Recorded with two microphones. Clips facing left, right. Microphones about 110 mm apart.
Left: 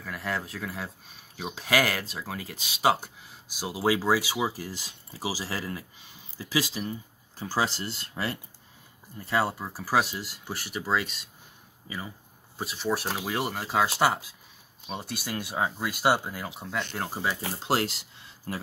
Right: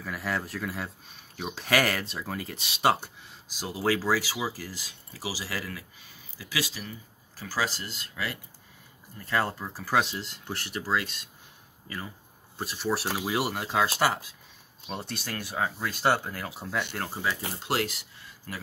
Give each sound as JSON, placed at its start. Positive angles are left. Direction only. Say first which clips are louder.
{"t": 0.0, "sound": "speech", "louder": "right 1 dB", "side_deg": 0}
{"t": 9.2, "sound": "speech", "louder": "left 1 dB", "side_deg": 10}
{"t": 12.5, "sound": "speech", "louder": "even", "side_deg": 0}
{"t": 13.8, "sound": "speech", "louder": "left 2 dB", "side_deg": 15}
{"t": 14.9, "sound": "speech", "louder": "left 1 dB", "side_deg": 5}
{"t": 15.3, "sound": "speech", "louder": "left 1 dB", "side_deg": 20}
{"t": 16.5, "sound": "speech", "louder": "right 2 dB", "side_deg": 0}
{"t": 17.0, "sound": "speech", "louder": "left 1 dB", "side_deg": 15}
{"t": 17.6, "sound": "speech", "louder": "left 2 dB", "side_deg": 30}